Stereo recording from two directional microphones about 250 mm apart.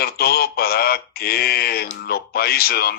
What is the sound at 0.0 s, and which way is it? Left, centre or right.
Speech, left.